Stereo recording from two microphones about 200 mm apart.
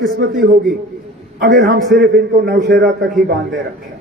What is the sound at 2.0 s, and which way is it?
A man's voice, 55° right (ahead or behind).